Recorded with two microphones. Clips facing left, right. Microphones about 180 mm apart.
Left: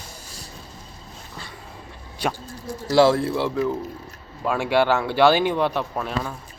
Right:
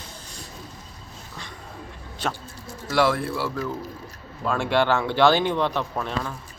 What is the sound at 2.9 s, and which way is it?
Speech, 30° left (ahead or behind).